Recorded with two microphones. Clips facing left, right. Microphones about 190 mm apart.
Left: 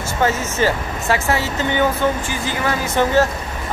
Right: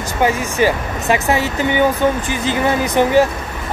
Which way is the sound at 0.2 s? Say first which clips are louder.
Right 3 dB; 15° right (ahead or behind).